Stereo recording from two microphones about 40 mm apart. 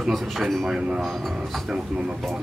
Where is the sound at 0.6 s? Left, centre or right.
Centre.